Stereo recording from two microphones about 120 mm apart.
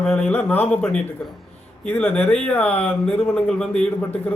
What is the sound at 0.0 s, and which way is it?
A man's voice, 10° left (ahead or behind).